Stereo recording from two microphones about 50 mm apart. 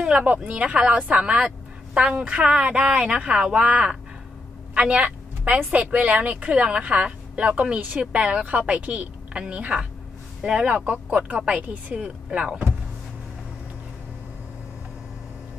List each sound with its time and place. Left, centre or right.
0.0 s a woman's voice: right